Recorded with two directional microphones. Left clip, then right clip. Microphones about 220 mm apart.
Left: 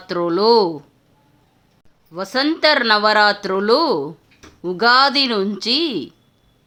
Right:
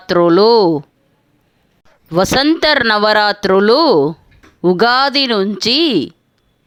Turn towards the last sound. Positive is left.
turn(degrees=-35)  # may be behind; listen again after turning